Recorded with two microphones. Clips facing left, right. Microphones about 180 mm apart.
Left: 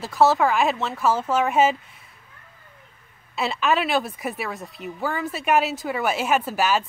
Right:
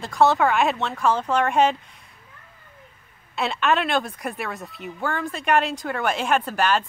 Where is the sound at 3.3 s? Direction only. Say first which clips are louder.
Even; centre (ahead or behind).